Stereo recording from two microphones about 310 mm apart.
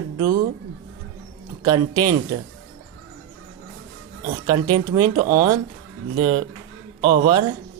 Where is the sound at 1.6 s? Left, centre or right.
Centre.